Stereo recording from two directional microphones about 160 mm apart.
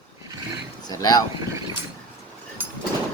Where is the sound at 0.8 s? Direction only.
25° left (ahead or behind).